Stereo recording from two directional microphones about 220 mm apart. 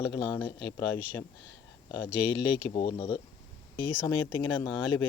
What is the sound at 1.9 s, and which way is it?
Speech, 20° left (ahead or behind).